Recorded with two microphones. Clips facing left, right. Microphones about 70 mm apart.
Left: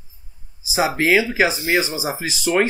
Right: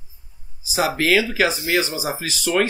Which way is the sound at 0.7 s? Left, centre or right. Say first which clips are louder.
Left 1 dB; centre.